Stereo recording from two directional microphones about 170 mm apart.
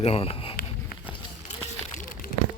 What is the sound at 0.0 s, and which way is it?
Speech, 35° left (ahead or behind).